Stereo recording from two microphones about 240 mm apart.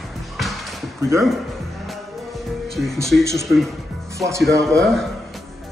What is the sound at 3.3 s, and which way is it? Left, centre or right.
Speech, centre.